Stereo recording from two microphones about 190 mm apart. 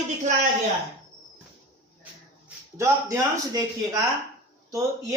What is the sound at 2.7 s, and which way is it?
Speech, 15° right (ahead or behind).